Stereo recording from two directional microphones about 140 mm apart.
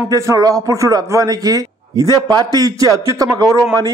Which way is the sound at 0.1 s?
25° right (ahead or behind).